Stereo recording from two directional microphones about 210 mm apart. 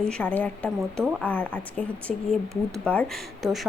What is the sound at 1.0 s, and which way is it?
Speech, 5° right (ahead or behind).